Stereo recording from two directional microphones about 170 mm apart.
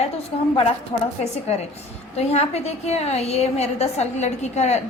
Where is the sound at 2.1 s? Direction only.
40° left (ahead or behind).